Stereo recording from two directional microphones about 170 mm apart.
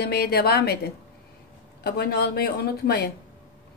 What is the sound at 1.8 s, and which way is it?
Speech, 70° left (ahead or behind).